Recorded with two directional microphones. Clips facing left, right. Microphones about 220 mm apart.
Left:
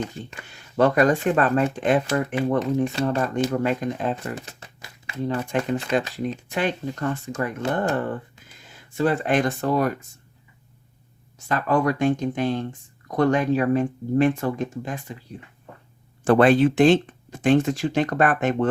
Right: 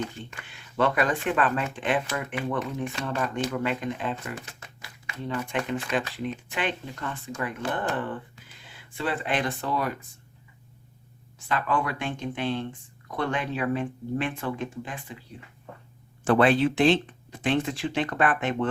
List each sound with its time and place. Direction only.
0.4 s speech: 40° left (ahead or behind)
11.3 s speech: 40° left (ahead or behind)
16.2 s speech: 45° left (ahead or behind)